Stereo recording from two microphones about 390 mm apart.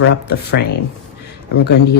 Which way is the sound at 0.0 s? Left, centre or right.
Left.